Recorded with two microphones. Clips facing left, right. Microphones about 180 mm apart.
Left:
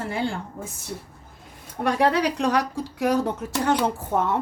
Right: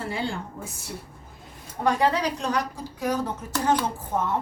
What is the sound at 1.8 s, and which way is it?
Speech, 65° left (ahead or behind).